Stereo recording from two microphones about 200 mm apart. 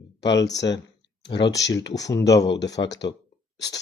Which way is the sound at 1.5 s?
60° left (ahead or behind).